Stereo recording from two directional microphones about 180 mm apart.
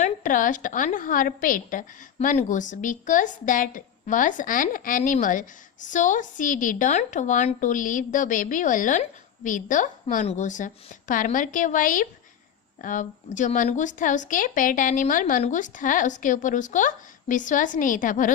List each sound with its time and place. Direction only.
0.0 s a woman's voice: 45° left (ahead or behind)
2.1 s a woman's voice: 40° left (ahead or behind)